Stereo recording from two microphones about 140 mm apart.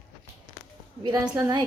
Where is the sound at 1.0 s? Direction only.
30° right (ahead or behind).